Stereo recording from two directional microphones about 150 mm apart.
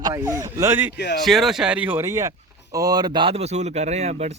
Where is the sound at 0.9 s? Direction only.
90° left.